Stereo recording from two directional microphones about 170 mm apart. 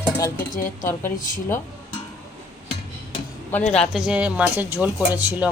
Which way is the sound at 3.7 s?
Centre (ahead or behind).